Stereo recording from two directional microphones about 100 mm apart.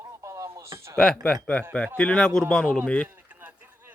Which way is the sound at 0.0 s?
30° right (ahead or behind).